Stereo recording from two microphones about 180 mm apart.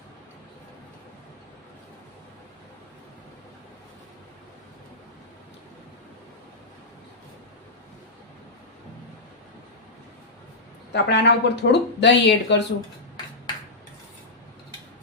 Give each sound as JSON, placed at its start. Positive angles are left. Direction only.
{"t": 10.9, "sound": "speech", "side_deg": 70}